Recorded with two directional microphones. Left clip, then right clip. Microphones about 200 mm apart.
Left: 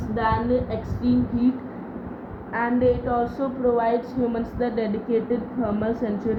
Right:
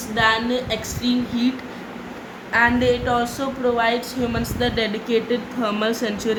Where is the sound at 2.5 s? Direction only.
20° right (ahead or behind).